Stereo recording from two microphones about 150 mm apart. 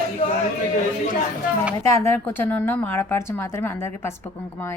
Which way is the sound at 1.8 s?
20° left (ahead or behind).